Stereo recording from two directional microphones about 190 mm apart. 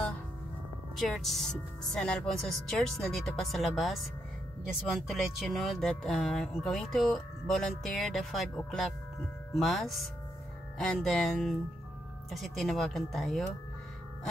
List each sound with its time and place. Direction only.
0.9 s speech: centre (ahead or behind)